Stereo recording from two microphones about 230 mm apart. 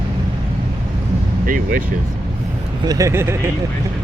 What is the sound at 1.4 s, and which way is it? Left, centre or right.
Vehicle, right.